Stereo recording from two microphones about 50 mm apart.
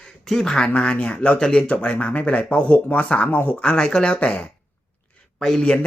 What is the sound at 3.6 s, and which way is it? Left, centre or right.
Speech, centre.